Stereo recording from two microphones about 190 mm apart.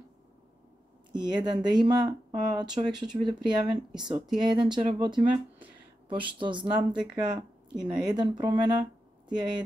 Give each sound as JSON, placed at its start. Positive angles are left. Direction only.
{"t": 1.1, "sound": "speech", "side_deg": -25}